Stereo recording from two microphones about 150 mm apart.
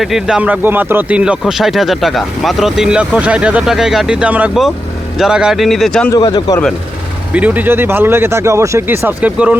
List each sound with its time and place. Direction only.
0.0 s speech: 5° right (ahead or behind)
6.1 s speech: 30° left (ahead or behind)
7.3 s speech: 10° right (ahead or behind)